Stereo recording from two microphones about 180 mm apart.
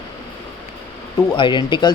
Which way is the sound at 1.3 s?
25° left (ahead or behind).